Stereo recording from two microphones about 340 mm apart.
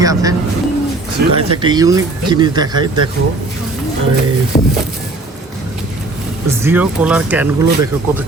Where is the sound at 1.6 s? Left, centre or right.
Centre.